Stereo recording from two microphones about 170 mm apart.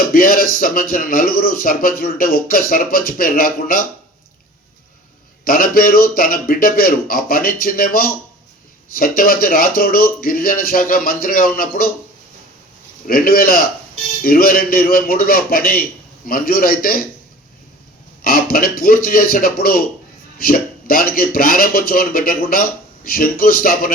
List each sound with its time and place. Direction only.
0.1 s a man's voice: 55° left (ahead or behind)
5.5 s a man's voice: 60° left (ahead or behind)
13.1 s a man's voice: 60° left (ahead or behind)
18.2 s a man's voice: 60° left (ahead or behind)